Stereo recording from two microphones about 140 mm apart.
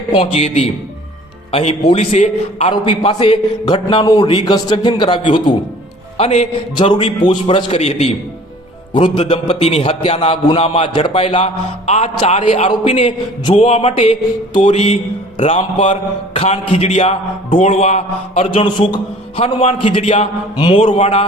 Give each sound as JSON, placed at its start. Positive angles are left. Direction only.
{"t": 0.1, "sound": "a man's voice", "side_deg": 45}
{"t": 2.8, "sound": "a man's voice", "side_deg": 40}
{"t": 6.1, "sound": "a man's voice", "side_deg": 50}
{"t": 6.9, "sound": "a man's voice", "side_deg": 35}
{"t": 8.9, "sound": "a man's voice", "side_deg": 35}
{"t": 9.2, "sound": "a man's voice", "side_deg": 50}
{"t": 20.6, "sound": "a man's voice", "side_deg": 35}